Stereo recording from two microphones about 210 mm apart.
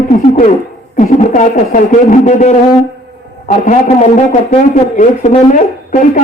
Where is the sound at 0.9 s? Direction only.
35° left (ahead or behind).